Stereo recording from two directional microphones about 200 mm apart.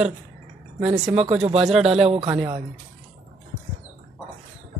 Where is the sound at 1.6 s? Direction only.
Centre (ahead or behind).